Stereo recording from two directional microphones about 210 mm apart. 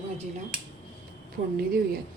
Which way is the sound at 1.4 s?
60° right (ahead or behind).